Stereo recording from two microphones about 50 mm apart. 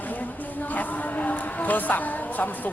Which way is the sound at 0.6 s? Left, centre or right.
Left.